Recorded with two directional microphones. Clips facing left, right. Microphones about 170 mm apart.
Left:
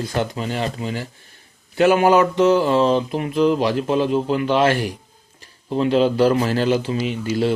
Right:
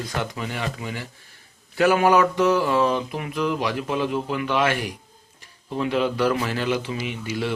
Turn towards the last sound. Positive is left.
turn(degrees=35)  # may be behind; listen again after turning